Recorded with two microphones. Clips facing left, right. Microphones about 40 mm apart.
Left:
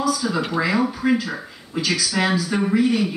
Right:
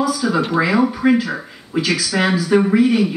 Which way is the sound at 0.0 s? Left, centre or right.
Centre.